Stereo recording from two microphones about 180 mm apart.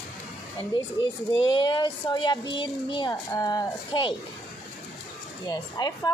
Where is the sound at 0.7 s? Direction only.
25° left (ahead or behind).